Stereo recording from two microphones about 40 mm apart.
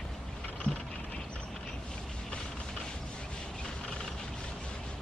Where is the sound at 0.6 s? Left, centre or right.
Right.